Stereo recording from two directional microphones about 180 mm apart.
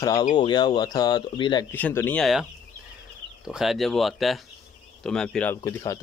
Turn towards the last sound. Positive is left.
turn(degrees=15)  # may be behind; listen again after turning